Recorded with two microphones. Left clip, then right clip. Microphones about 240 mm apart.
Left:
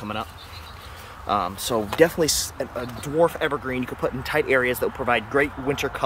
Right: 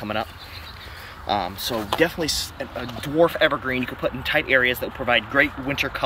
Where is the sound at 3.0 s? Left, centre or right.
Centre.